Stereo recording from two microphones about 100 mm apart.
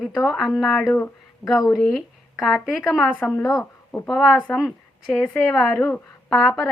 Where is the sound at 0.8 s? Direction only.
25° left (ahead or behind).